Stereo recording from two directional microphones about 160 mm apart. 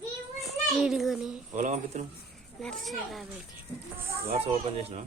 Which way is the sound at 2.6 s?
Centre (ahead or behind).